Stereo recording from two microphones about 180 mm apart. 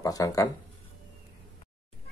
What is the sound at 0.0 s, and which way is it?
Speech, 20° left (ahead or behind).